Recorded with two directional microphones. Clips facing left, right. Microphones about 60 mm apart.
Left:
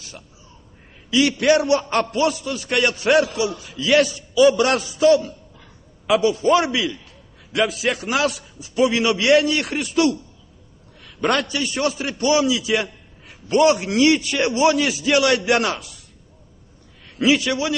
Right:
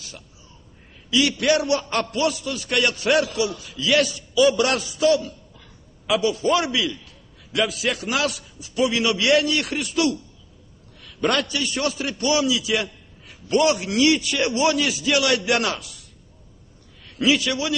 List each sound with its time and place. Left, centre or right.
1.1 s a man's voice: left